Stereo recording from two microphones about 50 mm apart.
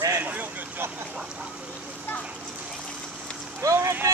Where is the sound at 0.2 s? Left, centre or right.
Right.